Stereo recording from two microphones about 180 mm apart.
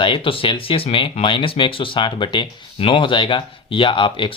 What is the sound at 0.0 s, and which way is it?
Speech, 30° left (ahead or behind).